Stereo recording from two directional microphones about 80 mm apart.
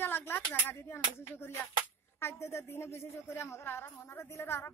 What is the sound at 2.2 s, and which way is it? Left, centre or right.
A woman's voice, left.